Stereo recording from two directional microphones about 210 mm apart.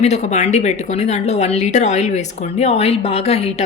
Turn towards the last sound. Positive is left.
turn(degrees=30)  # may be behind; listen again after turning